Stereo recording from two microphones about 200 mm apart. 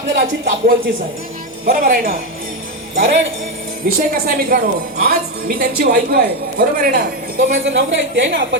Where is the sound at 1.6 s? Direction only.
45° right (ahead or behind).